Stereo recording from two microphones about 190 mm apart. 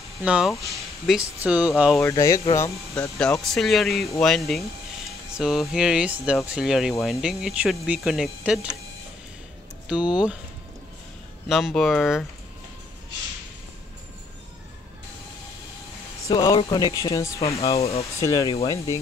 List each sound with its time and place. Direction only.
0.2 s speech: 5° right (ahead or behind)
2.0 s speech: 15° left (ahead or behind)
3.2 s speech: 5° left (ahead or behind)
9.8 s speech: 5° right (ahead or behind)
11.4 s speech: centre (ahead or behind)
16.3 s speech: 20° left (ahead or behind)
17.7 s speech: 35° left (ahead or behind)
18.2 s speech: 20° left (ahead or behind)